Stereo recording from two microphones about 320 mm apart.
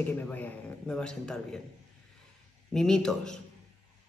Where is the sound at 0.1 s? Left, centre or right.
Centre.